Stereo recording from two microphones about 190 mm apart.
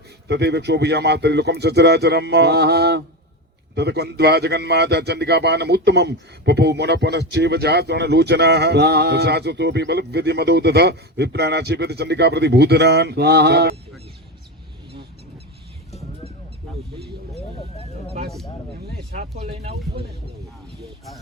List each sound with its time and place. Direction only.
0.3 s a man's voice: 60° right (ahead or behind)
19.4 s speech: 30° right (ahead or behind)